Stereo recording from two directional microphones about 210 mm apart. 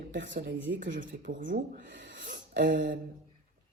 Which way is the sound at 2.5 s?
55° right (ahead or behind).